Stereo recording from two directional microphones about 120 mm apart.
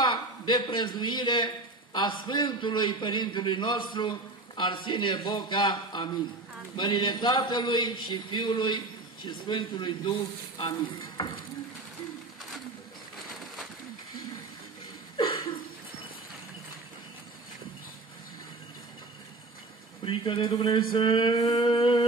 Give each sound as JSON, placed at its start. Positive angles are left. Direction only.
{"t": 0.0, "sound": "a man's voice", "side_deg": 40}
{"t": 10.6, "sound": "stir", "side_deg": 35}
{"t": 15.1, "sound": "a sound", "side_deg": 45}
{"t": 20.1, "sound": "a man's voice", "side_deg": 45}